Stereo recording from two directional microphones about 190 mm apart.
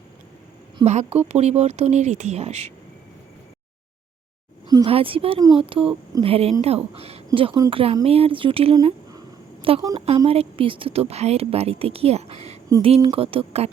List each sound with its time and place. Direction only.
0.9 s a woman's voice: 35° right (ahead or behind)
4.7 s a woman's voice: 25° right (ahead or behind)
9.1 s a sound: 30° right (ahead or behind)
10.2 s a woman's voice: 30° right (ahead or behind)